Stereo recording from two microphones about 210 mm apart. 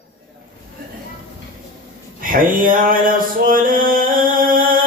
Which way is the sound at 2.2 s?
40° right (ahead or behind).